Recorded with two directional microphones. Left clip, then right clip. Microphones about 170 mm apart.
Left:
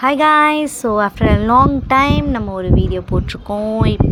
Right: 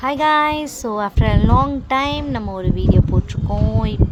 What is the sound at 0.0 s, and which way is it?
Speech, 25° left (ahead or behind).